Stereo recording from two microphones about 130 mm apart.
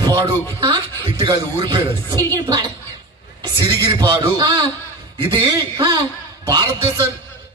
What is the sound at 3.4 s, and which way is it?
A man's voice, 40° right (ahead or behind).